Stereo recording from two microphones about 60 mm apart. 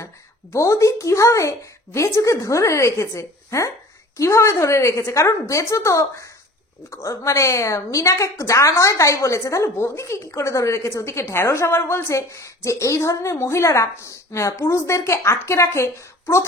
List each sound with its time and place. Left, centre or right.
0.0 s a woman's voice: left